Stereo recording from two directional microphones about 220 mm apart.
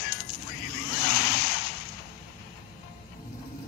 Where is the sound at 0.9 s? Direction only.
45° left (ahead or behind).